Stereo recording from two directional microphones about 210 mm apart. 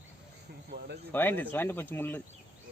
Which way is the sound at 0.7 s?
55° right (ahead or behind).